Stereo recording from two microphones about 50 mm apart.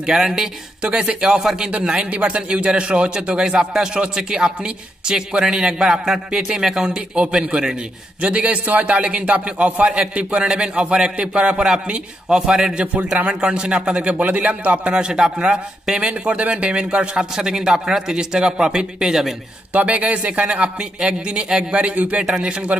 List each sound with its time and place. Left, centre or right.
0.0 s a man's voice: centre
2.0 s a man's voice: right
15.0 s a man's voice: centre
19.7 s a man's voice: right
22.2 s a man's voice: centre